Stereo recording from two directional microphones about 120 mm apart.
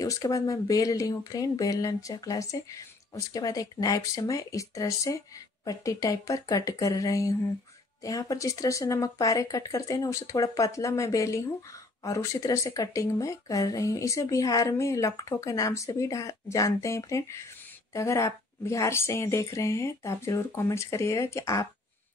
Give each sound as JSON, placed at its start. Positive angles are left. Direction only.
{"t": 0.0, "sound": "speech", "side_deg": 30}